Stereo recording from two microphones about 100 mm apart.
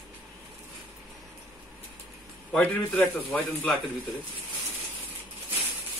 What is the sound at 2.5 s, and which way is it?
A man's voice, 15° left (ahead or behind).